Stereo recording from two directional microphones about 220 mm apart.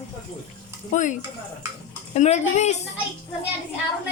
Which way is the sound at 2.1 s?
30° left (ahead or behind).